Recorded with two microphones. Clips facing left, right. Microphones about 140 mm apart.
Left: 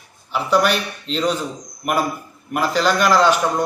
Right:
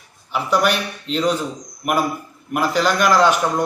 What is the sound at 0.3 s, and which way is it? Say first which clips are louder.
A man's voice: left 1 dB; 5° right (ahead or behind).